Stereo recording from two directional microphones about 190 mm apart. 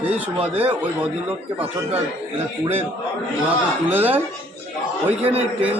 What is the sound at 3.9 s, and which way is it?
Speech, 10° right (ahead or behind).